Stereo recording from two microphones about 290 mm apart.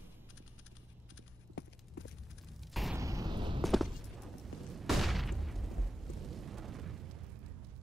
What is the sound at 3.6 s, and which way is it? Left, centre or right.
Fusillade, centre.